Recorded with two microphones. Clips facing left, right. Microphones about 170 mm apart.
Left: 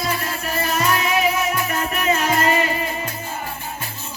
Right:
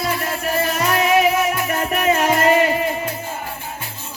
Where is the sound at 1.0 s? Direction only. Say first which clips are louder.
Right 5 dB; 60° right (ahead or behind).